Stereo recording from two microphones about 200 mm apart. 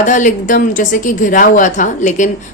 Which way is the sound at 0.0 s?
40° left (ahead or behind).